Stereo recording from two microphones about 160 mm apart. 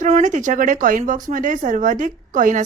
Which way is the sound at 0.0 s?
50° right (ahead or behind).